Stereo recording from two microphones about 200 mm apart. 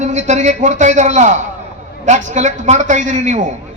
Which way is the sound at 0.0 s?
35° right (ahead or behind).